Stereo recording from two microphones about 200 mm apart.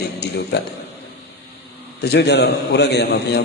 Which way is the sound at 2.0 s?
55° left (ahead or behind).